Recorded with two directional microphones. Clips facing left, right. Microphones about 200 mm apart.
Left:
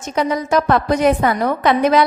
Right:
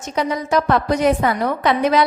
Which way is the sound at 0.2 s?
50° left (ahead or behind).